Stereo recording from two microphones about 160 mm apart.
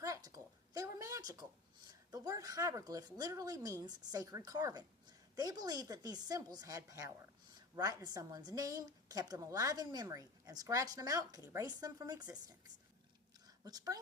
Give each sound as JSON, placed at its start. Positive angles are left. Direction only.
{"t": 0.0, "sound": "a sound", "side_deg": -20}
{"t": 1.9, "sound": "a woman's voice", "side_deg": -25}
{"t": 13.7, "sound": "a woman's voice", "side_deg": -25}